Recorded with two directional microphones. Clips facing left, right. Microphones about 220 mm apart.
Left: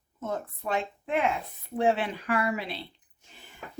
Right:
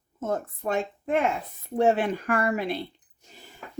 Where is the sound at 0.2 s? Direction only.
50° right (ahead or behind).